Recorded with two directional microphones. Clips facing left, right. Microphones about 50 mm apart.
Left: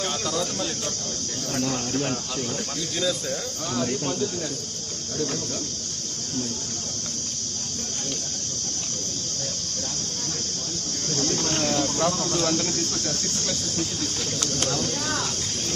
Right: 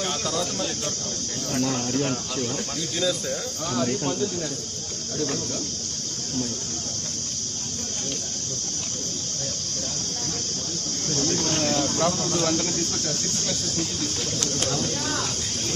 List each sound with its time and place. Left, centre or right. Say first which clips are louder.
0.0 s speech: even; centre
1.7 s speech: right 1 dB; centre
11.5 s speech: even; left
11.8 s speech: even; right
12.9 s speech: even; left